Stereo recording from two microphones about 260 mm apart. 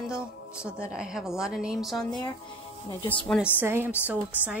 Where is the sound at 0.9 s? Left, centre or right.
Centre.